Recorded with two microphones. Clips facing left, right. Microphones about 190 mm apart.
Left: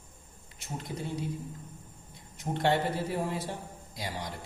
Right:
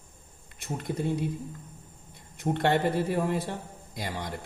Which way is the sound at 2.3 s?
55° right (ahead or behind).